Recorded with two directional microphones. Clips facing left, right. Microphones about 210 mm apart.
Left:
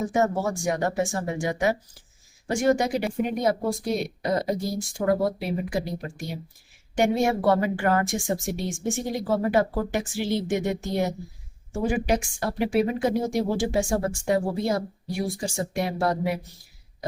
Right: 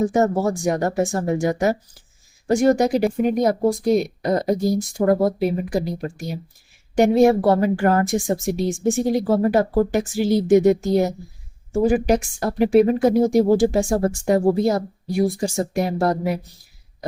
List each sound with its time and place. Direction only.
0.1 s a woman's voice: 40° right (ahead or behind)